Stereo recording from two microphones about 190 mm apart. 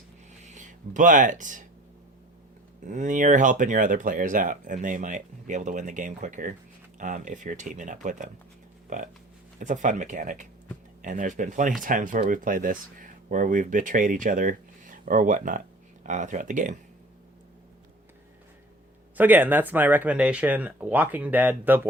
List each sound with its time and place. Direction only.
0.4 s speech: 40° right (ahead or behind)
2.8 s speech: 40° right (ahead or behind)
9.6 s speech: 40° right (ahead or behind)
19.1 s speech: 10° right (ahead or behind)